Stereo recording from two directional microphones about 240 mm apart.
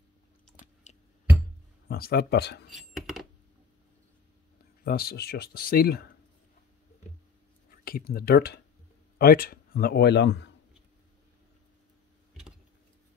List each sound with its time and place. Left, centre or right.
0.9 s music: left
1.9 s speech: left
2.7 s a sound: centre
4.8 s speech: left
7.7 s speech: left